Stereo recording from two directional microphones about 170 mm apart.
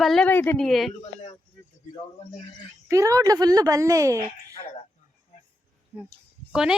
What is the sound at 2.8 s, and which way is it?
A woman's voice, 20° right (ahead or behind).